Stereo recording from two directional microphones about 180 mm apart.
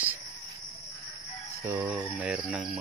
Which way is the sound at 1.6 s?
15° right (ahead or behind).